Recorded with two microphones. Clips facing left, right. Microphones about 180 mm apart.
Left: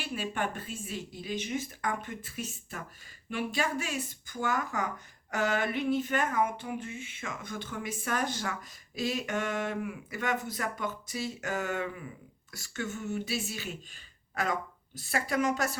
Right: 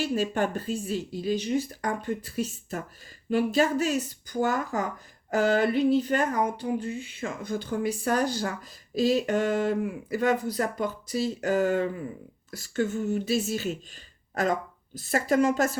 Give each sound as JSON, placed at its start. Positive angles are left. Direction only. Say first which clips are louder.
{"t": 0.0, "sound": "speech", "louder": "right 8 dB", "side_deg": -40}
{"t": 14.9, "sound": "speech", "louder": "right 7 dB", "side_deg": -40}